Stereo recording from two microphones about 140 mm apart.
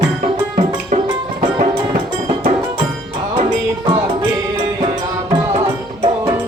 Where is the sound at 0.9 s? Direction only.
60° right (ahead or behind).